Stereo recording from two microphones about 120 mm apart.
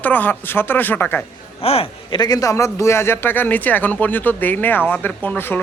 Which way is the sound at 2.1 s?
35° left (ahead or behind).